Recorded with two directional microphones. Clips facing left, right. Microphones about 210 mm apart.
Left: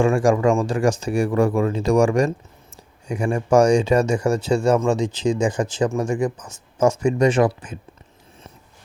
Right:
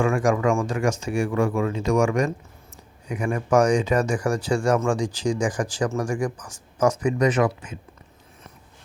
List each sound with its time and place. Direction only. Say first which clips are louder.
0.0 s speech: left 4 dB; 30° left (ahead or behind)